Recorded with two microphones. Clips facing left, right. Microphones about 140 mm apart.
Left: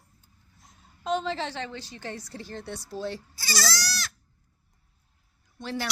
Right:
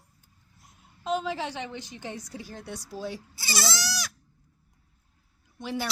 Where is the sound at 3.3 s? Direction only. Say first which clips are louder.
Even; 25° right (ahead or behind).